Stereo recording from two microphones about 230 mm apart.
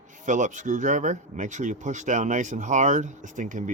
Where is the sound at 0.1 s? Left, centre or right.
Right.